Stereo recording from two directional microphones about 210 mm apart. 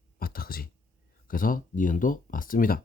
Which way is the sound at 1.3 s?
40° left (ahead or behind).